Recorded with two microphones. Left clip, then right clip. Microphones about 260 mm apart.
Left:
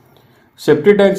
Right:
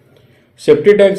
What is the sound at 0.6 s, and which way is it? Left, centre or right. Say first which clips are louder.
Speech: right 2 dB; left.